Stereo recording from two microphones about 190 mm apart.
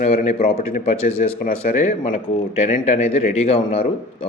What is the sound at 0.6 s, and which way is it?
Speech, 35° left (ahead or behind).